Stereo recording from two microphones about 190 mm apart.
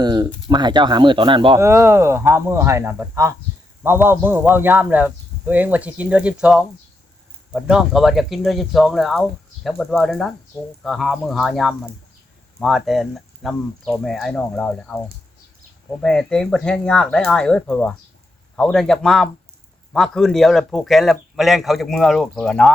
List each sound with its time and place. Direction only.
0.0 s a sound: 20° right (ahead or behind)
0.4 s speech: 25° right (ahead or behind)
1.5 s a man's voice: 15° right (ahead or behind); by 22.7 s 5° left (ahead or behind)